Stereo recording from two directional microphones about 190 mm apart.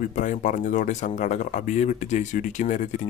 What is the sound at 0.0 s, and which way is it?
Speech, 40° left (ahead or behind).